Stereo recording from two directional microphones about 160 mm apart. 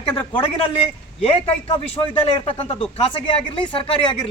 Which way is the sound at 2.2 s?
35° left (ahead or behind).